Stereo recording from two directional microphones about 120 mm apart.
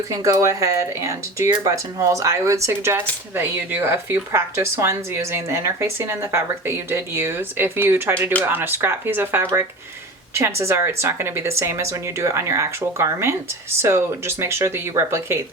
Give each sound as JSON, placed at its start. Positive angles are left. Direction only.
{"t": 0.1, "sound": "speech", "side_deg": -30}